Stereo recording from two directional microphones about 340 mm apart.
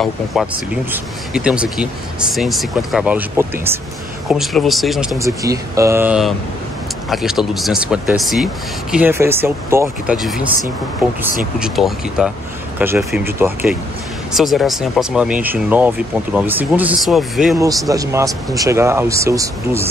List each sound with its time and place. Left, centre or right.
0.0 s speech: centre
11.6 s speech: centre